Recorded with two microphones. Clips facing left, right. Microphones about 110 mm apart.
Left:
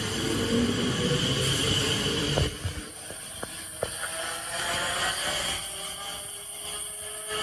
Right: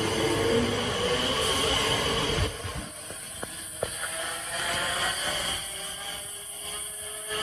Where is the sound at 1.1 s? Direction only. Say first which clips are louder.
Right 1 dB; 65° right (ahead or behind).